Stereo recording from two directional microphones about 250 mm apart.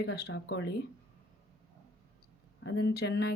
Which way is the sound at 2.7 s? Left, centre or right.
Left.